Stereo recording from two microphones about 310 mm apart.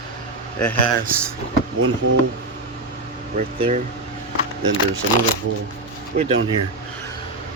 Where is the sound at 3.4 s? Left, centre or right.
Right.